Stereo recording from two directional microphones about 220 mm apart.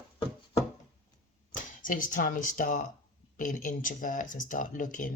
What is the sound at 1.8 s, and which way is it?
Speech, 40° left (ahead or behind).